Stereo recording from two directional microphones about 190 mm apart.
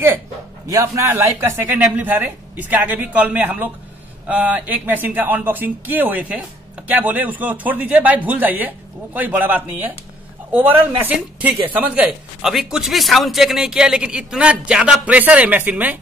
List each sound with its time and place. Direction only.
0.7 s speech: 15° right (ahead or behind)